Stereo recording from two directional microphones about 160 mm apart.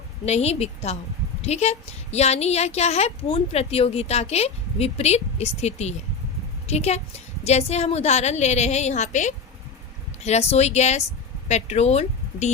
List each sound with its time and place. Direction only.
0.3 s a woman's voice: 40° left (ahead or behind)